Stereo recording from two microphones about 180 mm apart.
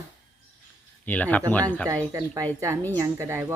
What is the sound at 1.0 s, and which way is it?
Speech, 10° left (ahead or behind).